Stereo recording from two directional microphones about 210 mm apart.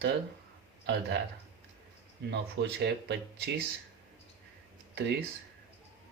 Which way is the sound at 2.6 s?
55° right (ahead or behind).